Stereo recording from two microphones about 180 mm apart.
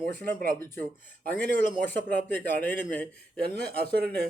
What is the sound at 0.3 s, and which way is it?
Speech, 55° right (ahead or behind).